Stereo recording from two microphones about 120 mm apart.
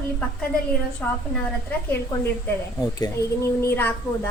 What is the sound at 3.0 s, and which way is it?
Speech, 30° left (ahead or behind).